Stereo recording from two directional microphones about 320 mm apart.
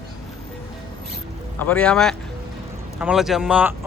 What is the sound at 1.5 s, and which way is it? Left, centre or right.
Speech, centre.